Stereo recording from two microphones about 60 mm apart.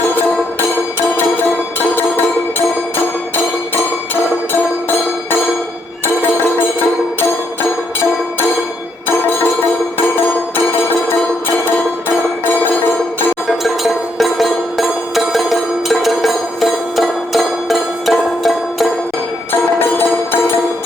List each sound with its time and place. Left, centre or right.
13.5 s music: centre
19.8 s music: left